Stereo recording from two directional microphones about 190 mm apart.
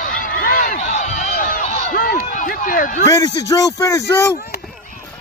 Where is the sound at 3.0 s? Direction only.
20° left (ahead or behind).